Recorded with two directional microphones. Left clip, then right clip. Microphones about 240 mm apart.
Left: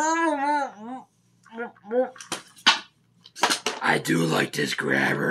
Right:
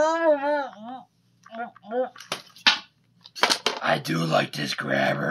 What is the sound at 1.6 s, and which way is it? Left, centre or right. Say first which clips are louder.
Speech: left 3 dB; right.